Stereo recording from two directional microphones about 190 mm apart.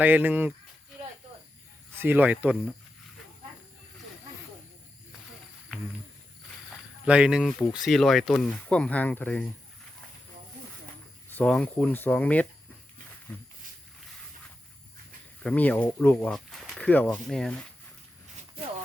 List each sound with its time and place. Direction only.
0.0 s speech: 10° right (ahead or behind)
2.0 s speech: 10° right (ahead or behind)
7.0 s speech: 5° right (ahead or behind)
11.3 s speech: 5° left (ahead or behind)
15.4 s speech: 10° left (ahead or behind)